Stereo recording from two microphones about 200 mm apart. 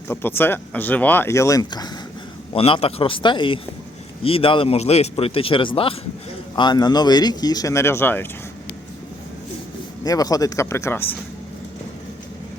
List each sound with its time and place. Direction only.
0.1 s speech: 10° left (ahead or behind)
10.0 s speech: 20° left (ahead or behind)